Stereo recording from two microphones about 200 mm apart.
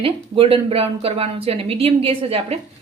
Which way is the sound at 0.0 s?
25° right (ahead or behind).